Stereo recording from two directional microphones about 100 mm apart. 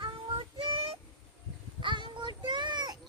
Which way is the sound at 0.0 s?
60° right (ahead or behind).